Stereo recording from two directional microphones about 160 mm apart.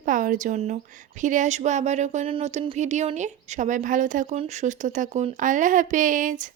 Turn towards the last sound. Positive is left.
turn(degrees=-55)  # may be behind; listen again after turning